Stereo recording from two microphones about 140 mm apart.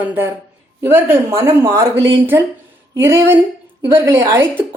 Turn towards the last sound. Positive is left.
turn(degrees=-15)  # may be behind; listen again after turning